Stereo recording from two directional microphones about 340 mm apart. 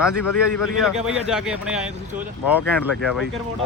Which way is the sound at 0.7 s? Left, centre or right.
Centre.